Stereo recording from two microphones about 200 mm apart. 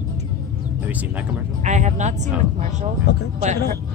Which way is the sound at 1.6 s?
35° right (ahead or behind).